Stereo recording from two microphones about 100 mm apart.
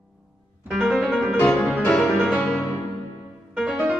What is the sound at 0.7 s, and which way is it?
Music, 5° right (ahead or behind).